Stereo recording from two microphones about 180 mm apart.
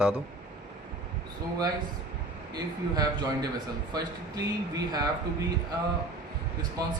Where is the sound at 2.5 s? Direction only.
20° right (ahead or behind).